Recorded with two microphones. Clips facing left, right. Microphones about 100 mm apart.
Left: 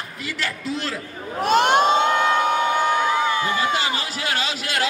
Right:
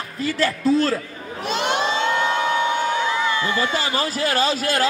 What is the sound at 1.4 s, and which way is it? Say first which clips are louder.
Crowd: left 6 dB; 50° left (ahead or behind).